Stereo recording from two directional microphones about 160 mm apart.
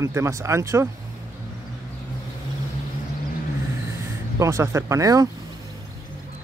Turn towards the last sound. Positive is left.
turn(degrees=-20)  # may be behind; listen again after turning